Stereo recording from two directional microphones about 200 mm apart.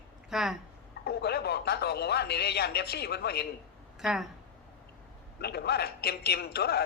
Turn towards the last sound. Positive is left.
turn(degrees=50)  # may be behind; listen again after turning